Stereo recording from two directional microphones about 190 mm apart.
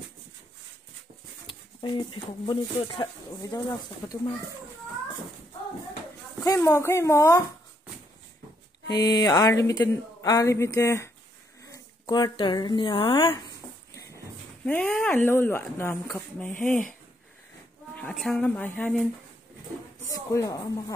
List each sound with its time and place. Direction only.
1.8 s speech: 25° left (ahead or behind)
6.4 s speech: 15° left (ahead or behind)
8.9 s speech: 20° left (ahead or behind)
14.0 s speech: 10° left (ahead or behind)
17.9 s speech: 5° left (ahead or behind)
20.1 s speech: 15° left (ahead or behind)